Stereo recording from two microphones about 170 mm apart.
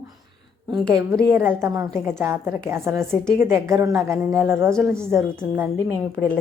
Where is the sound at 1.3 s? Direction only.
15° right (ahead or behind).